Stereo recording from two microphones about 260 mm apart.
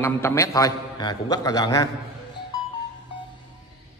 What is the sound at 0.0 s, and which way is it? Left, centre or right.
A man's voice, centre.